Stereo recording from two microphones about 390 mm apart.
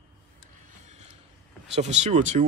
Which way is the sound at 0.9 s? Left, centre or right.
Centre.